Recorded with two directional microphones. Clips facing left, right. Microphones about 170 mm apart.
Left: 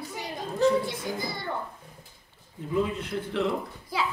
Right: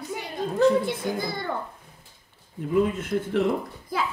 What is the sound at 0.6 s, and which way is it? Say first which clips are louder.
Speech: right 3 dB; 55° right (ahead or behind).